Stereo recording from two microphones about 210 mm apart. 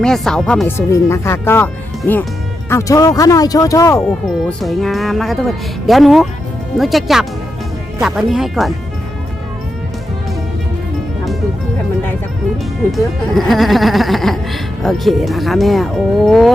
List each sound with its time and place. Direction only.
0.0 s speech: centre (ahead or behind)
4.4 s speech: centre (ahead or behind)
13.0 s speech: centre (ahead or behind)